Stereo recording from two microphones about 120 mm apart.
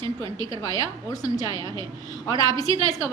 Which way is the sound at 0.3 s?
25° left (ahead or behind).